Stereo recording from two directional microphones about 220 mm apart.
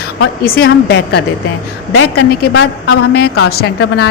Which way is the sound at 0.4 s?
45° left (ahead or behind).